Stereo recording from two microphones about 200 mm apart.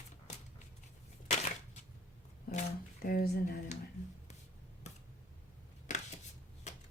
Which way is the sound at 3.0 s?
50° left (ahead or behind).